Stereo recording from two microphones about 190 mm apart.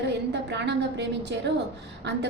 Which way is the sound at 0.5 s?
65° right (ahead or behind).